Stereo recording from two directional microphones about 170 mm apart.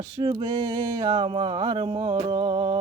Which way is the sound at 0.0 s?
25° right (ahead or behind).